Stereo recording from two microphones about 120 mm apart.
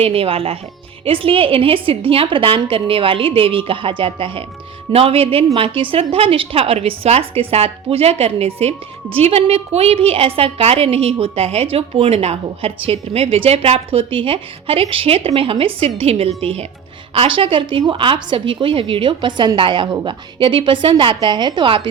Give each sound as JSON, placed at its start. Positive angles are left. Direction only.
{"t": 0.0, "sound": "a woman's voice", "side_deg": -50}